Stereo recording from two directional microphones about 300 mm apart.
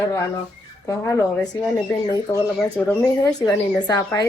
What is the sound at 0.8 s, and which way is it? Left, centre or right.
Speech, centre.